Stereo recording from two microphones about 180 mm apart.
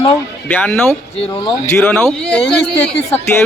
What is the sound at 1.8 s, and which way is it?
Speech, 5° left (ahead or behind).